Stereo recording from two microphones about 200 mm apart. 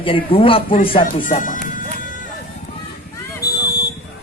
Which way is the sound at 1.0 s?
40° left (ahead or behind).